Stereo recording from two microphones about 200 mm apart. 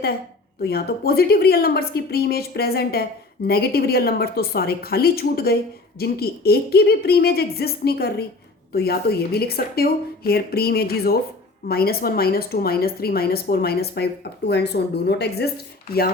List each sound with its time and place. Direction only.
0.6 s a woman's voice: 50° left (ahead or behind)